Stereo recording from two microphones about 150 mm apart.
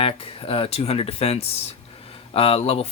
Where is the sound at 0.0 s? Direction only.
40° left (ahead or behind).